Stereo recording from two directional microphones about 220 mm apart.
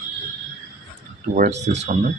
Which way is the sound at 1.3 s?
35° right (ahead or behind).